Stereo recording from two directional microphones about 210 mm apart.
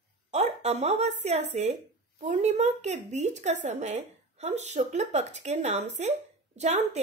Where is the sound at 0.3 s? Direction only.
30° right (ahead or behind).